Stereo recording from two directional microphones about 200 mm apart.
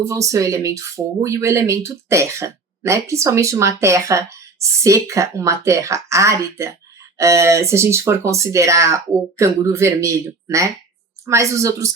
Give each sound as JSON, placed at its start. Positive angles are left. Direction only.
{"t": 0.1, "sound": "speech", "side_deg": -15}